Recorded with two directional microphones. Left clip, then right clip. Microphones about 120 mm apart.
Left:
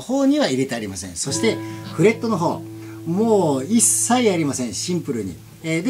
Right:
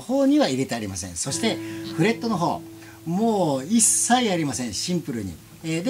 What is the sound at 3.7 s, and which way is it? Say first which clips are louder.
A woman's voice: left 1 dB; 30° right (ahead or behind).